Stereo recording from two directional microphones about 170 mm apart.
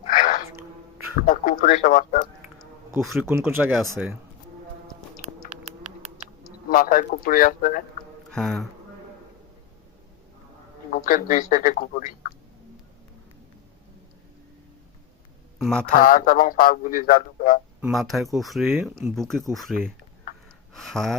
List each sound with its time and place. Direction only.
0.0 s a sound: 50° left (ahead or behind)
1.3 s a man's voice: 50° left (ahead or behind)
3.0 s speech: centre (ahead or behind)
3.2 s speech: 15° right (ahead or behind)
5.2 s a sound: 40° right (ahead or behind)
6.7 s a man's voice: 55° left (ahead or behind)
8.3 s speech: 5° left (ahead or behind)
10.9 s a man's voice: 50° left (ahead or behind)
15.5 s speech: centre (ahead or behind)
15.9 s speech: 55° left (ahead or behind)
17.9 s speech: centre (ahead or behind)
20.7 s speech: centre (ahead or behind)